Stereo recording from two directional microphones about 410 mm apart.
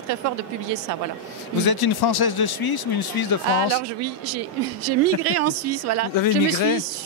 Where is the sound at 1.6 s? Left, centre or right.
Left.